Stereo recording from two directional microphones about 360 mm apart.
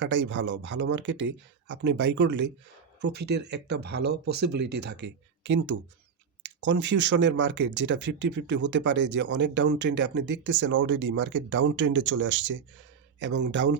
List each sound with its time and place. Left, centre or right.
0.0 s speech: right
6.4 s a sound: right
6.7 s speech: right